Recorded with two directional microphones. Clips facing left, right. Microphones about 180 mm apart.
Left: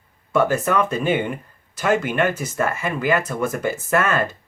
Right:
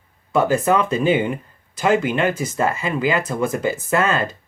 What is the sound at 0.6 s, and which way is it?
Speech, 30° right (ahead or behind).